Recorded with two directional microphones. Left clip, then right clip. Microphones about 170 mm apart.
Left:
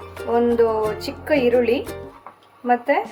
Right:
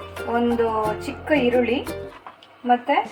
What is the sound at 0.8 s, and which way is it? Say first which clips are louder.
Speech: left 1 dB; centre (ahead or behind).